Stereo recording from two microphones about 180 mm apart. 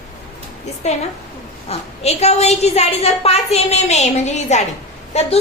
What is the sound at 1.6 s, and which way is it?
A woman's voice, 35° left (ahead or behind).